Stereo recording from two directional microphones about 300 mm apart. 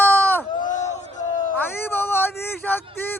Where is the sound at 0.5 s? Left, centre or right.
Left.